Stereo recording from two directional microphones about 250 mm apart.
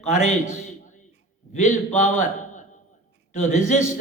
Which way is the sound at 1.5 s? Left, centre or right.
Left.